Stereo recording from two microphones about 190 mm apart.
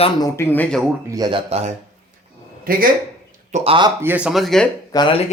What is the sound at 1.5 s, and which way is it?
Speech, 35° right (ahead or behind).